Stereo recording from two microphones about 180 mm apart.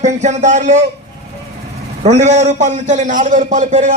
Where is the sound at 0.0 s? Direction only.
40° right (ahead or behind).